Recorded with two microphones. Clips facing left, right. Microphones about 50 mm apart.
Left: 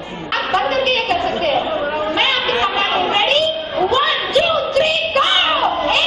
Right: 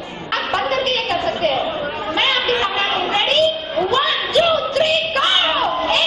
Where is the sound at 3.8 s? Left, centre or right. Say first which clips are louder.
Left 3 dB; left.